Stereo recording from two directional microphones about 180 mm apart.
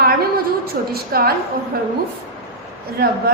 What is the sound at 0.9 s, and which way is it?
Speech, 55° right (ahead or behind).